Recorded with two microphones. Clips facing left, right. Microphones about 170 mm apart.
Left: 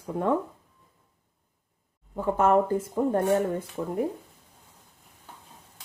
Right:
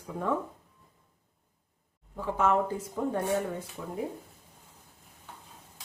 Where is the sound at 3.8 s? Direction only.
60° left (ahead or behind).